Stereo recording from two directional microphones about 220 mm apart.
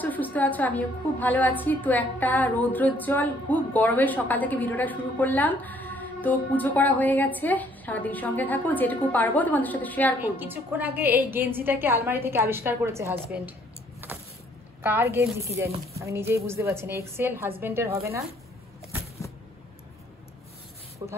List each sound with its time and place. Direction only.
0.0 s a woman's voice: 5° left (ahead or behind)
10.2 s a woman's voice: 10° right (ahead or behind)
14.8 s a woman's voice: 10° right (ahead or behind)
21.0 s a woman's voice: 20° right (ahead or behind)